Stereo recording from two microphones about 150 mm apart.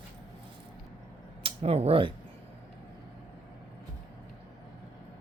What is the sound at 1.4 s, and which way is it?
Speech, 40° right (ahead or behind).